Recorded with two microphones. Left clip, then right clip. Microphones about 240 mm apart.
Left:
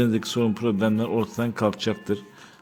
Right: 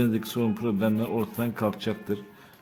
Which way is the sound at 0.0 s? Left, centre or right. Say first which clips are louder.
Left 4 dB; centre.